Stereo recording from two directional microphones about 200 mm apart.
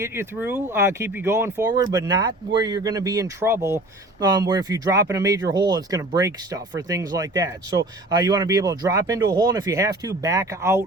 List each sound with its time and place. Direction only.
0.0 s speech: 10° right (ahead or behind)